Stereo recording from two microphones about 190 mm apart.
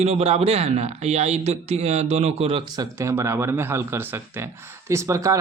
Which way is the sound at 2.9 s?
15° right (ahead or behind).